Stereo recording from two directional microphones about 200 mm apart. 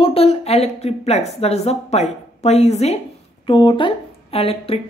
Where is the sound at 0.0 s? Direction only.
30° left (ahead or behind).